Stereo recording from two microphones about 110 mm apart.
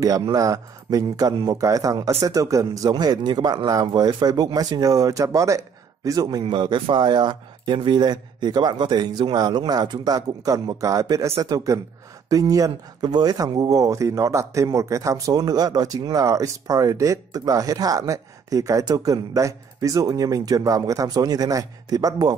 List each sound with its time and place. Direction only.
0.2 s speech: 35° right (ahead or behind)
6.4 s speech: 45° right (ahead or behind)